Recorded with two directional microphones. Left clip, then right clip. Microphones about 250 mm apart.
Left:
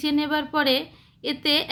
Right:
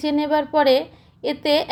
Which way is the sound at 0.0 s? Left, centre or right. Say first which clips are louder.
Right 4 dB; centre.